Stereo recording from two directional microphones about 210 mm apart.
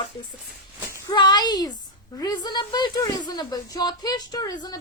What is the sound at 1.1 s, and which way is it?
Speech, 20° left (ahead or behind).